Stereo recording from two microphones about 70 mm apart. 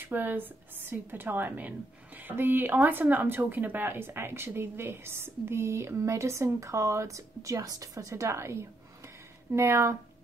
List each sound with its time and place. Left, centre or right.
0.0 s speech: right